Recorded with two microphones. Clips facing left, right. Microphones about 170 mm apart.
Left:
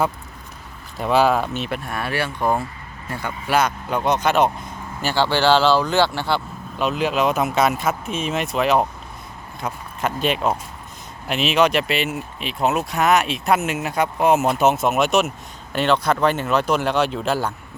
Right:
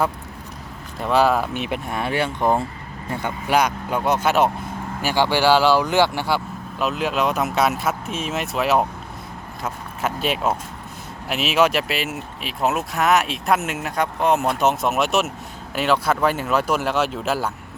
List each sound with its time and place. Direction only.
1.0 s speech: centre (ahead or behind)
1.5 s speech: 15° right (ahead or behind)
3.8 s speech: 5° right (ahead or behind)